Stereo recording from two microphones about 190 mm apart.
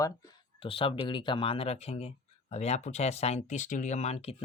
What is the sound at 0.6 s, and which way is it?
Speech, 25° left (ahead or behind).